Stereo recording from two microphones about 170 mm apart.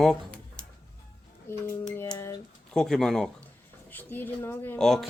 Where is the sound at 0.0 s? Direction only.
5° left (ahead or behind).